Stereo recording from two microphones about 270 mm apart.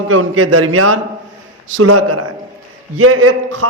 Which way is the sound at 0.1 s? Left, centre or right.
Right.